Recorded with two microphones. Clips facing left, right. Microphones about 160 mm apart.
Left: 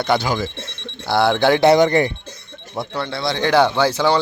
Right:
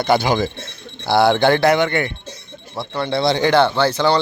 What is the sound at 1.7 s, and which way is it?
Speech, 35° left (ahead or behind).